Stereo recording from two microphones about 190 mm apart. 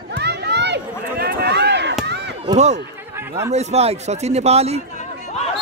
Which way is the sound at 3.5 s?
35° right (ahead or behind).